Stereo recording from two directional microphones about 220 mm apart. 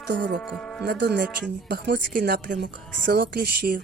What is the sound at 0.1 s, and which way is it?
Speech, 55° right (ahead or behind).